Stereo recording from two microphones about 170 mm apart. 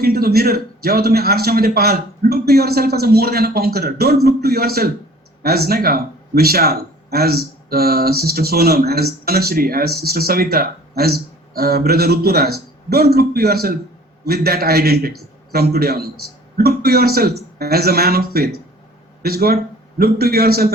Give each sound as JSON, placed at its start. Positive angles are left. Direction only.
{"t": 0.0, "sound": "speech", "side_deg": -65}